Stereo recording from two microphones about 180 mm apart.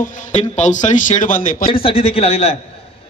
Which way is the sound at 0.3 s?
40° left (ahead or behind).